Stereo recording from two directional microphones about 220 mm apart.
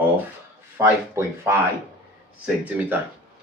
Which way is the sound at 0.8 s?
10° right (ahead or behind).